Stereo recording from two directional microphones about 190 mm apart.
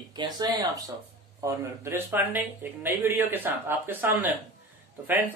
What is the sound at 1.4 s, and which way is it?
Speech, 15° right (ahead or behind).